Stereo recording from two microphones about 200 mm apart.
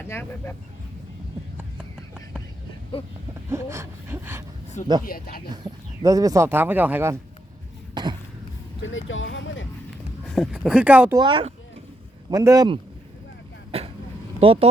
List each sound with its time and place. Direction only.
0.0 s speech: 10° left (ahead or behind)
3.0 s speech: 30° left (ahead or behind)
3.5 s speech: 15° right (ahead or behind)
5.0 s speech: 45° left (ahead or behind)
5.5 s speech: 20° right (ahead or behind)
8.0 s cough: 20° right (ahead or behind)
8.8 s speech: 75° left (ahead or behind)
10.2 s speech: centre (ahead or behind)
11.2 s speech: 25° right (ahead or behind)
13.7 s vehicle: 30° right (ahead or behind)
14.3 s speech: 30° right (ahead or behind)